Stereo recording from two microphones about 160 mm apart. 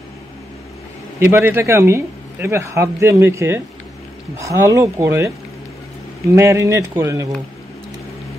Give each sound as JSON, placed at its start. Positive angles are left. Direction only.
{"t": 1.2, "sound": "a man's voice", "side_deg": -15}
{"t": 6.3, "sound": "speech", "side_deg": -20}